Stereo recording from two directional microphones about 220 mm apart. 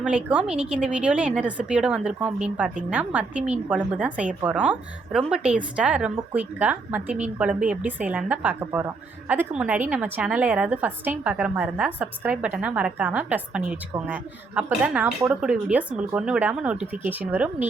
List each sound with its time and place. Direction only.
0.0 s a woman's voice: 5° right (ahead or behind)